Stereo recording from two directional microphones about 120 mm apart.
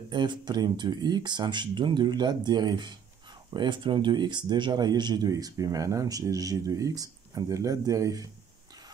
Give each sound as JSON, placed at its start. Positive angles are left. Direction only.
{"t": 0.1, "sound": "speech", "side_deg": -40}